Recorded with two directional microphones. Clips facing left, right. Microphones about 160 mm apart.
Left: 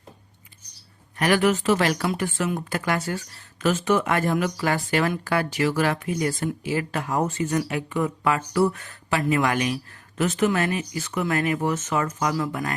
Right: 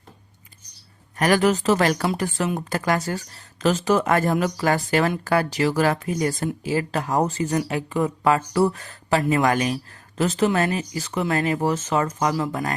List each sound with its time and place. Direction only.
1.1 s speech: 40° right (ahead or behind)